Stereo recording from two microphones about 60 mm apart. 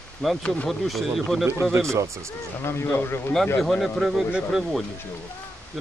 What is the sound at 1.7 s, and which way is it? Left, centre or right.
Speech, right.